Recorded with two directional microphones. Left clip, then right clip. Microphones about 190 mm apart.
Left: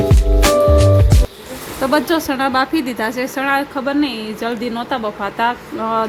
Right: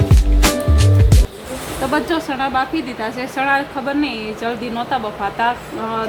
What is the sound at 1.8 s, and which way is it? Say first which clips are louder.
Speech: left 3 dB; 25° left (ahead or behind).